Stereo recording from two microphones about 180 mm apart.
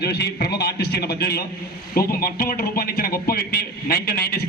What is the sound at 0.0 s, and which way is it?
A man's voice, 65° left (ahead or behind).